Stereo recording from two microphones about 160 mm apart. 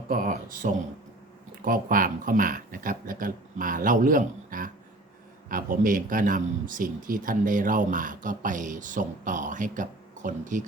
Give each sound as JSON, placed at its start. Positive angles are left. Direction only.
{"t": 0.1, "sound": "speech", "side_deg": -55}